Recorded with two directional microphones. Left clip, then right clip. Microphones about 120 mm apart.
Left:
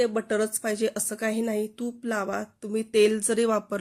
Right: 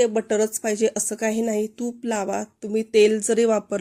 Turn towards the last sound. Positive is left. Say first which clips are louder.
# right 5 dB
turn(degrees=-25)  # may be behind; listen again after turning